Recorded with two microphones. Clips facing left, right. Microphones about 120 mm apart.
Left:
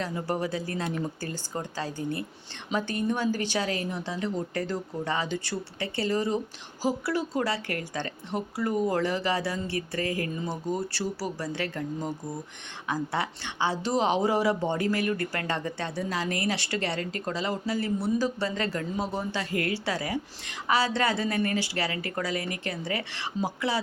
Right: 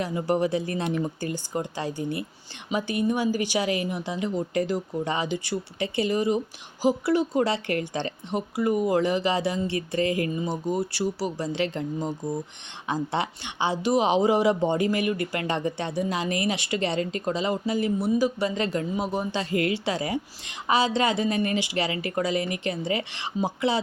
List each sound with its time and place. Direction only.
0.0 s a woman's voice: 15° right (ahead or behind)